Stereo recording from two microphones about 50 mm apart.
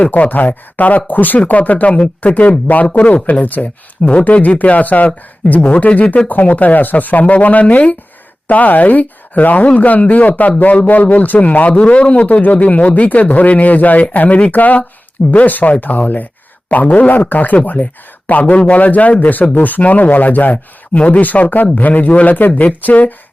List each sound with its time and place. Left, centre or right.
0.0 s speech: left
17.2 s speech: left